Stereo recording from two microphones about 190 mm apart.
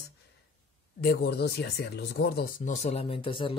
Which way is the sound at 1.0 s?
55° left (ahead or behind).